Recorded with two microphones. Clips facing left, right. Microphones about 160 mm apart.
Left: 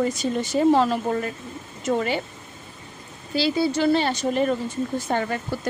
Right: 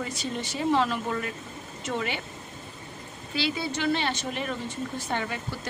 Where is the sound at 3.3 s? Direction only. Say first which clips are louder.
Left 8 dB; 35° left (ahead or behind).